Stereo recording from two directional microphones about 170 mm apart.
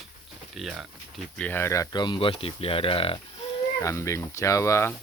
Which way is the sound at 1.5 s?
15° left (ahead or behind).